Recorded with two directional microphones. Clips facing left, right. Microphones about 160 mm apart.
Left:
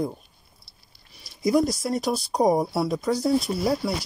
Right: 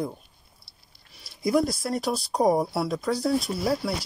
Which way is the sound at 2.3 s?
15° left (ahead or behind).